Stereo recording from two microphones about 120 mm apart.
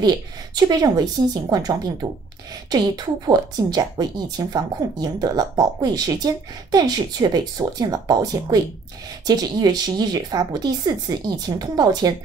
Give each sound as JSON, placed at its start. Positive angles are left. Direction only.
{"t": 0.6, "sound": "speech", "side_deg": -35}